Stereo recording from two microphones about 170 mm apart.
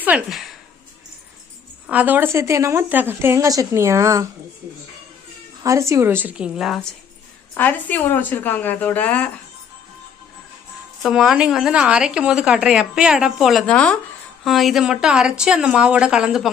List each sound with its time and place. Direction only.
0.0 s speech: 5° right (ahead or behind)
1.9 s a woman's voice: 10° right (ahead or behind)
5.6 s a woman's voice: 20° right (ahead or behind); by 6.9 s centre (ahead or behind)
7.5 s a woman's voice: 10° left (ahead or behind)
11.0 s speech: centre (ahead or behind)